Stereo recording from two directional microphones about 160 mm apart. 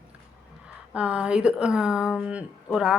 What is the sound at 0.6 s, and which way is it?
Speech, 5° right (ahead or behind).